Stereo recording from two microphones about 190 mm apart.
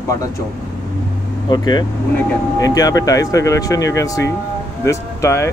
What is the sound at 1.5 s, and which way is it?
Speech, 20° left (ahead or behind).